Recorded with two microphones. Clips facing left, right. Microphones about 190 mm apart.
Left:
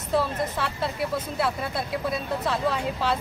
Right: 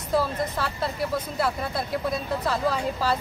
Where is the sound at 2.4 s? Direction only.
Centre (ahead or behind).